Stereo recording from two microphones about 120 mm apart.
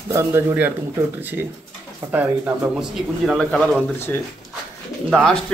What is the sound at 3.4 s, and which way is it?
Speech, 5° left (ahead or behind).